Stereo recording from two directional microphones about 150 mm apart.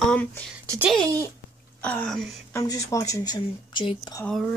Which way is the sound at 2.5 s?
20° left (ahead or behind).